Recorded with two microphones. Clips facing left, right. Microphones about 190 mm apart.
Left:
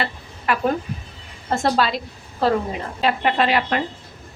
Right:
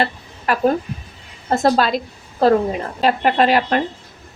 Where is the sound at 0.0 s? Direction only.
40° right (ahead or behind).